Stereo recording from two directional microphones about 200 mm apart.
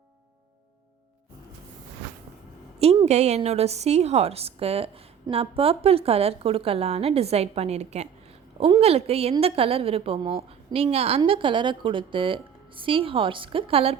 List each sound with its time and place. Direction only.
2.7 s a woman's voice: 30° right (ahead or behind)